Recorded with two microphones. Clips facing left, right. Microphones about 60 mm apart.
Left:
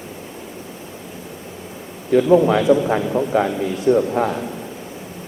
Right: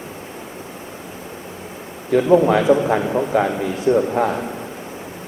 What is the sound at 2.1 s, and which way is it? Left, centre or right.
A man's voice, centre.